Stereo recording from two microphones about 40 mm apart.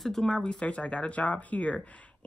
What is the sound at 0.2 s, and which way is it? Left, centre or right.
Speech, centre.